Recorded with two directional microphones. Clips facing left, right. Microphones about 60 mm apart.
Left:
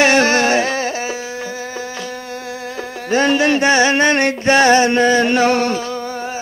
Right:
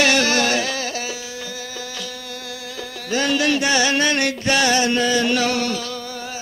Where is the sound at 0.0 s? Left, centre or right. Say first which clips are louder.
Left 5 dB; left.